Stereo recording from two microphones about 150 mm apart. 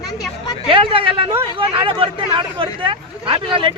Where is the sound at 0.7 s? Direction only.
35° right (ahead or behind).